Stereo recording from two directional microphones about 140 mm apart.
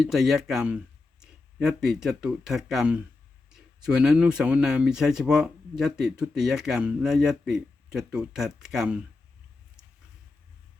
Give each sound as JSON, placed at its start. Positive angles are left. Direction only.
{"t": 0.0, "sound": "speech", "side_deg": 0}